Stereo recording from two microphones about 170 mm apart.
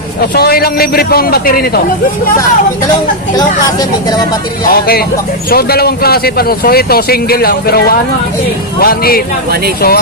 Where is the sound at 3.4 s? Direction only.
20° left (ahead or behind).